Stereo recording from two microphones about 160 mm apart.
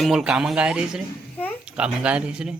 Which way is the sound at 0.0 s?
Centre (ahead or behind).